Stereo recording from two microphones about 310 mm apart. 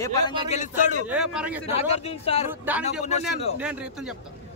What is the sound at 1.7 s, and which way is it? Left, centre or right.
Speech, centre.